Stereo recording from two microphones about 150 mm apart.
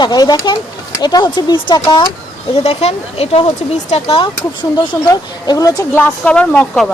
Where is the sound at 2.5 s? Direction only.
40° left (ahead or behind); by 5.8 s 25° left (ahead or behind).